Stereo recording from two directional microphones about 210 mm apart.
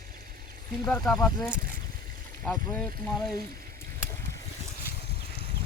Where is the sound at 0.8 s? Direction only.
5° left (ahead or behind).